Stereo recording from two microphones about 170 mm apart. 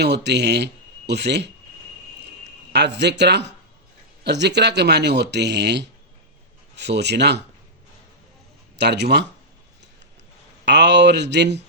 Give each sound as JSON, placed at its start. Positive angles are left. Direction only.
{"t": 0.0, "sound": "speech", "side_deg": -90}
{"t": 2.7, "sound": "speech", "side_deg": -80}
{"t": 8.7, "sound": "speech", "side_deg": -80}
{"t": 10.7, "sound": "speech", "side_deg": -90}